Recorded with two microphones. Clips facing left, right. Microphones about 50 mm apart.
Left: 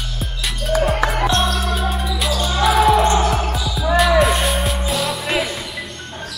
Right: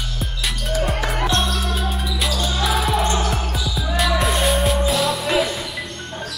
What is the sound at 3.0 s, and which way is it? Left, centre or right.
Music, left.